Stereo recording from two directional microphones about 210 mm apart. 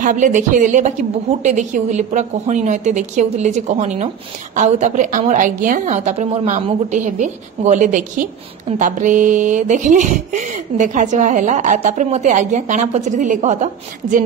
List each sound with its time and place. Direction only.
0.0 s a woman's voice: 40° right (ahead or behind)